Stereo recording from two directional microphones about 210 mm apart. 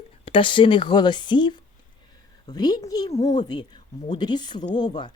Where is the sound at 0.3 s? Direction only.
25° left (ahead or behind).